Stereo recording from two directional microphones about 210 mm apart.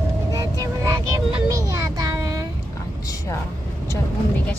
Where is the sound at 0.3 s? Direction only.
15° right (ahead or behind).